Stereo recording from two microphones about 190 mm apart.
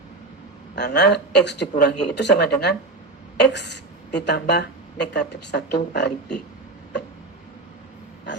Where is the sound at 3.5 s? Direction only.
65° left (ahead or behind).